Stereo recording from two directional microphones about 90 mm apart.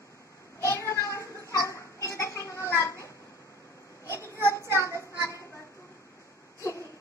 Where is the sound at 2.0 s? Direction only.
35° left (ahead or behind).